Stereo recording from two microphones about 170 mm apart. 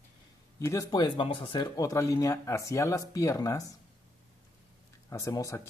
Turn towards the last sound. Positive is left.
turn(degrees=20)  # may be behind; listen again after turning